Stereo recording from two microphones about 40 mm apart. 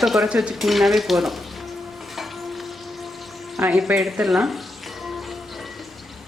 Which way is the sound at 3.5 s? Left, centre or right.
Centre.